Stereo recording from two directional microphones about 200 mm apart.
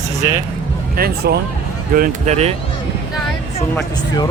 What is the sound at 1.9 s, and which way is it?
Speech, 40° right (ahead or behind).